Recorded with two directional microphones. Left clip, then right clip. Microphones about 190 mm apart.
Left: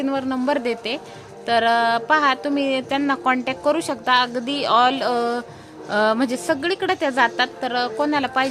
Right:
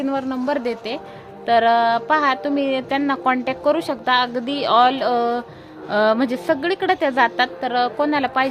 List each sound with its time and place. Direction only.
0.0 s speech: 5° left (ahead or behind)